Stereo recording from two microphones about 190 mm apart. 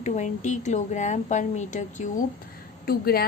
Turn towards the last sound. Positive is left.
turn(degrees=55)  # may be behind; listen again after turning